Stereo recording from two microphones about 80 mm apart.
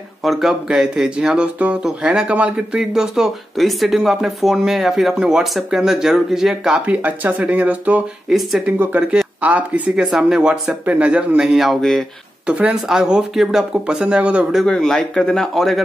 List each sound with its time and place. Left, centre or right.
0.2 s speech: centre
6.9 s speech: right
8.3 s speech: centre
8.6 s speech: centre
12.4 s speech: centre
14.7 s speech: centre